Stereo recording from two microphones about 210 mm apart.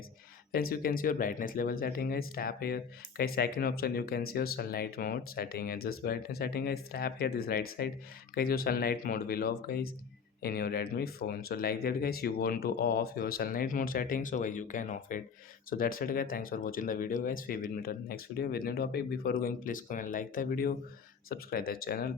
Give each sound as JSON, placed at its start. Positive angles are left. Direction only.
{"t": 0.5, "sound": "speech", "side_deg": 45}